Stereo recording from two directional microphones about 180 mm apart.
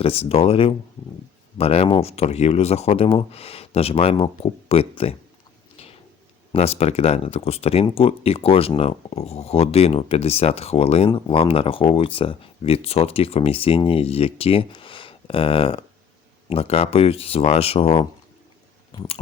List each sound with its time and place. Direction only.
0.0 s speech: 35° left (ahead or behind)
6.5 s speech: 35° left (ahead or behind)